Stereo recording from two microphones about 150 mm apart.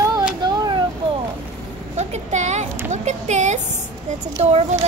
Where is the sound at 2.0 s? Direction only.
50° right (ahead or behind).